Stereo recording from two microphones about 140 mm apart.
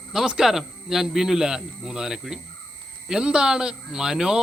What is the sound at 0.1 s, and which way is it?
Speech, 5° right (ahead or behind).